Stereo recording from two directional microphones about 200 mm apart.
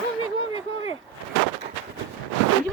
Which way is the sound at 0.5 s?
30° left (ahead or behind).